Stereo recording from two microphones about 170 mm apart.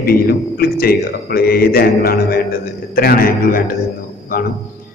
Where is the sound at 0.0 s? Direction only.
65° left (ahead or behind).